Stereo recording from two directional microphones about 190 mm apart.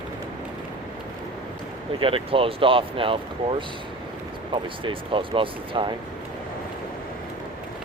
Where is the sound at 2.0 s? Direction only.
30° right (ahead or behind).